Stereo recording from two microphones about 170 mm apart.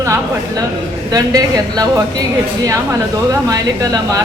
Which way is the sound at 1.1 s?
20° right (ahead or behind).